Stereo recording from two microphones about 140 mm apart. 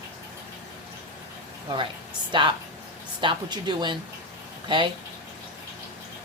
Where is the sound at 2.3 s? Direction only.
35° right (ahead or behind).